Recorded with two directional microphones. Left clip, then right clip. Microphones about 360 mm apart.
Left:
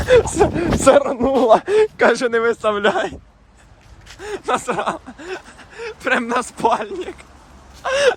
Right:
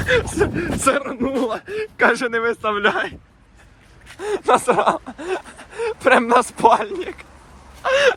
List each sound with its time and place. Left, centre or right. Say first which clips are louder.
0.0 s speech: left 5 dB; centre
1.5 s speech: left 12 dB; centre
4.2 s a sound: right 4 dB; centre